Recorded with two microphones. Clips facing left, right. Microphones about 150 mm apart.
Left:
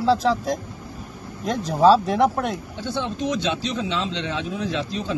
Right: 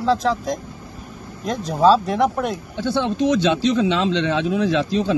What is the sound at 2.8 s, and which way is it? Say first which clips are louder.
Speech: right 8 dB; 90° right.